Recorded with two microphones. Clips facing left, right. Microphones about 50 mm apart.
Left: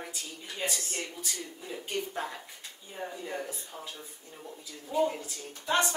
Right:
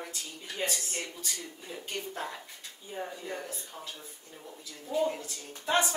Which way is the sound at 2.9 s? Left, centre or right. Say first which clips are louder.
Even; centre.